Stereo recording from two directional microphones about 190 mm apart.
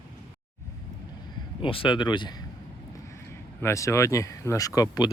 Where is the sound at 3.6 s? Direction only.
15° left (ahead or behind).